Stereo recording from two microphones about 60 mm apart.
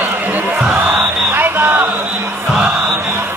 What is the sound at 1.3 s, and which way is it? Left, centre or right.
Music, right.